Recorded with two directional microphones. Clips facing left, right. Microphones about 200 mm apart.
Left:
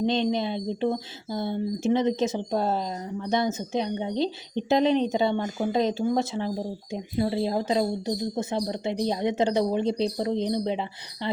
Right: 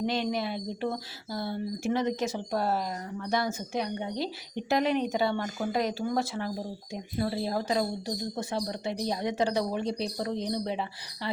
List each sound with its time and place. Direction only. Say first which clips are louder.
0.0 s speech: left 5 dB; 25° left (ahead or behind)